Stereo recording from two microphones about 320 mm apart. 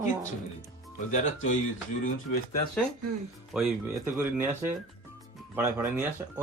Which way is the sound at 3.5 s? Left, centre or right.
Centre.